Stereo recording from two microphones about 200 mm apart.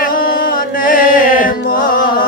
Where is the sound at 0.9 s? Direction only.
45° left (ahead or behind).